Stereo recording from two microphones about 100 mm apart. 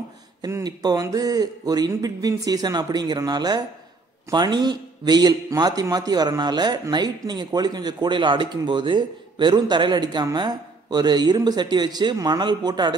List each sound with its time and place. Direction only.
0.7 s speech: 40° right (ahead or behind)